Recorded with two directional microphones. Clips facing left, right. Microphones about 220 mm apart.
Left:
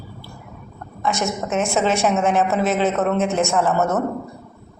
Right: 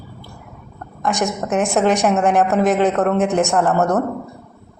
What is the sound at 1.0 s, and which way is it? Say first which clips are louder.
A woman's voice: right 2 dB; 15° right (ahead or behind).